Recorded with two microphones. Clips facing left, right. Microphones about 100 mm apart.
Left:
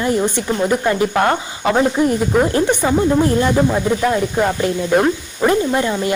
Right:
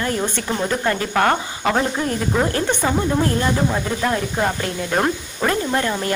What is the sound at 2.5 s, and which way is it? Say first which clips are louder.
Speech: left 5 dB; 20° left (ahead or behind).